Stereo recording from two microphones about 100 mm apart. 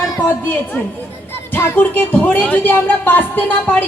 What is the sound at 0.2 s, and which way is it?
A woman's voice, 15° left (ahead or behind).